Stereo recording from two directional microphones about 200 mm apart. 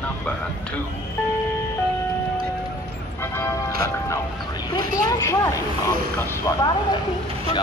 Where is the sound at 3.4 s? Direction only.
15° left (ahead or behind).